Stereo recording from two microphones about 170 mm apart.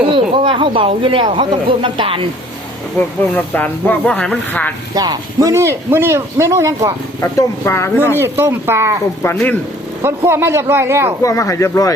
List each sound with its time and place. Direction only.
0.1 s speech: 30° right (ahead or behind)
3.3 s speech: 10° left (ahead or behind)
4.9 s a man's voice: 25° right (ahead or behind)
7.2 s speech: 15° left (ahead or behind)
8.1 s a man's voice: 15° right (ahead or behind)
9.2 s speech: 10° left (ahead or behind)
10.2 s a man's voice: 15° right (ahead or behind)
11.2 s speech: 20° left (ahead or behind)